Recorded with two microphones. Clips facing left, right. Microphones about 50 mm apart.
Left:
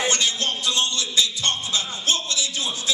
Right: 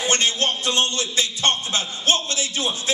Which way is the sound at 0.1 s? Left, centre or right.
Right.